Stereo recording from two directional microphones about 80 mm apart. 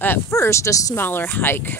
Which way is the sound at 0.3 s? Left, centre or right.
Left.